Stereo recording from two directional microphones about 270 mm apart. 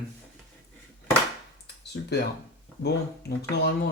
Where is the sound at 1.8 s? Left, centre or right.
Left.